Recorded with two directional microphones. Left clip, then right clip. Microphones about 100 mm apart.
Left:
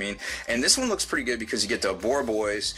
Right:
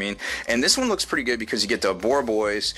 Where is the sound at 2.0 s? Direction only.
55° right (ahead or behind).